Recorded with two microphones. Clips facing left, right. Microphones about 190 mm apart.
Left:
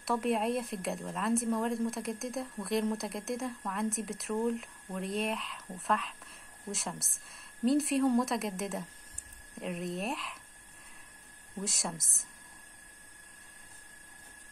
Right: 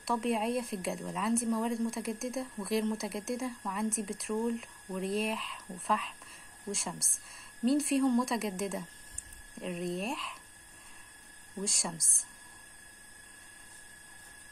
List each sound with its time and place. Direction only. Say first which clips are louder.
0.0 s speech: left 1 dB; centre (ahead or behind)
11.6 s speech: even; centre (ahead or behind)